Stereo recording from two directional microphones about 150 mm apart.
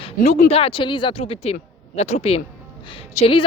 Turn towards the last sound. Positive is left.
turn(degrees=40)  # may be behind; listen again after turning